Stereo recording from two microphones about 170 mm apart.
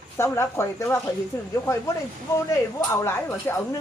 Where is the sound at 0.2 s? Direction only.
15° left (ahead or behind).